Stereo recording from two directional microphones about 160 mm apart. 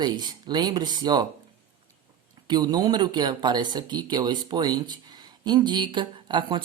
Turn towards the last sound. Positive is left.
turn(degrees=-30)  # may be behind; listen again after turning